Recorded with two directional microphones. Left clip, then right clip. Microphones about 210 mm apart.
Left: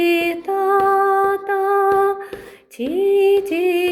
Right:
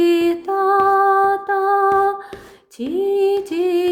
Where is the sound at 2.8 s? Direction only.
15° right (ahead or behind).